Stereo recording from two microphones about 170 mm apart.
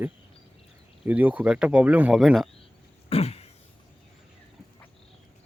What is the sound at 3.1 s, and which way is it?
Throat clearing, 35° left (ahead or behind).